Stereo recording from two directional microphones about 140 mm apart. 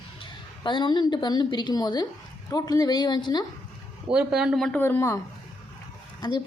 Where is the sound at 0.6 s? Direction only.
35° left (ahead or behind).